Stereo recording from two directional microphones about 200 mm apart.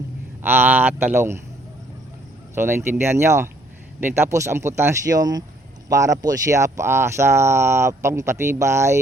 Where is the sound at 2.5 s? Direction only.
10° right (ahead or behind).